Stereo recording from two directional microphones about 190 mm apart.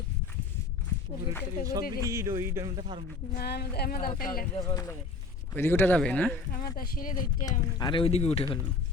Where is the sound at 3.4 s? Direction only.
55° left (ahead or behind).